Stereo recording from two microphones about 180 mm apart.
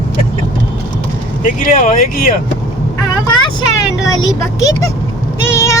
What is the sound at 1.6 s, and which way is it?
Speech, 50° left (ahead or behind).